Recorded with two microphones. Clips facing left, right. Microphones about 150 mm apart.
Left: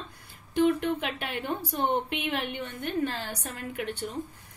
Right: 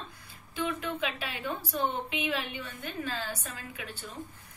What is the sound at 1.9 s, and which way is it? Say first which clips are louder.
A woman's voice: left 4 dB; 65° left (ahead or behind).